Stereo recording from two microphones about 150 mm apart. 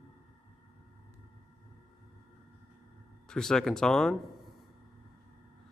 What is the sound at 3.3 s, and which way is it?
Speech, 5° left (ahead or behind).